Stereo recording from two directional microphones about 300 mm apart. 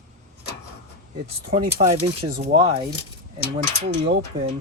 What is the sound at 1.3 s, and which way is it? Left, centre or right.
Speech, right.